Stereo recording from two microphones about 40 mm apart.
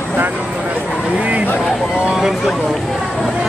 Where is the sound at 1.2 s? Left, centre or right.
Right.